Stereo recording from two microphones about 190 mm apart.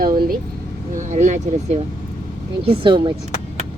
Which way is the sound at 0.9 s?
40° right (ahead or behind).